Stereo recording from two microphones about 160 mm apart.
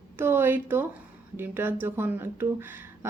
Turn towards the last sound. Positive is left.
turn(degrees=-15)  # may be behind; listen again after turning